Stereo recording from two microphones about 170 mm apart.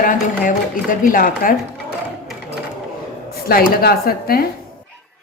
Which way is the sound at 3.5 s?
65° left (ahead or behind).